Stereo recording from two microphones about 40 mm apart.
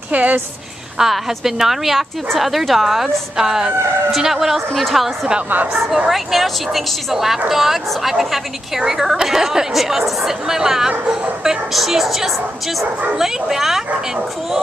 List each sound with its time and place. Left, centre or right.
0.1 s a woman's voice: right
0.9 s a woman's voice: centre
11.7 s a woman's voice: centre